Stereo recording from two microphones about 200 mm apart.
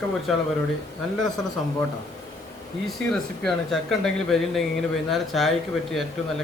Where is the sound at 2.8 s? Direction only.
Centre (ahead or behind).